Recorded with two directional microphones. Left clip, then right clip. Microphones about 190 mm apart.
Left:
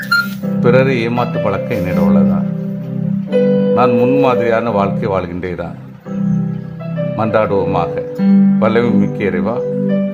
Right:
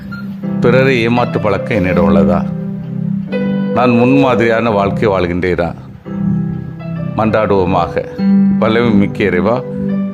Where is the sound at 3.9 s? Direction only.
10° right (ahead or behind).